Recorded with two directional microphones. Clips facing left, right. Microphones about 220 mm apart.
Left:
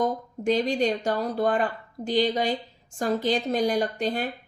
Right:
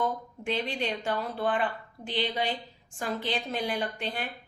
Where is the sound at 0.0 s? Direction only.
40° left (ahead or behind).